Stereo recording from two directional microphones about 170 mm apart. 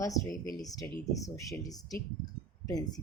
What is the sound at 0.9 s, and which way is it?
Speech, 20° left (ahead or behind).